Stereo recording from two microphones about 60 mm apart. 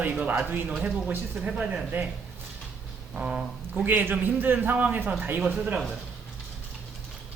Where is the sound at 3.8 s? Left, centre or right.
Right.